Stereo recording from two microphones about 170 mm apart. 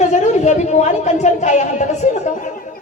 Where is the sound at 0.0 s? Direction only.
45° left (ahead or behind).